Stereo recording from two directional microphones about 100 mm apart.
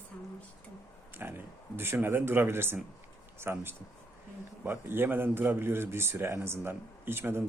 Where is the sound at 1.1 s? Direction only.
20° right (ahead or behind).